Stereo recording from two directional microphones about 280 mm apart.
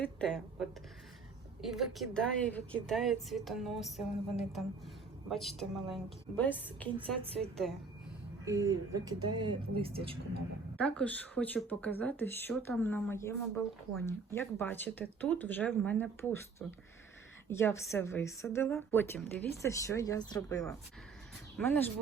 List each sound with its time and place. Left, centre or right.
0.0 s speech: centre
8.4 s speech: centre
10.8 s speech: centre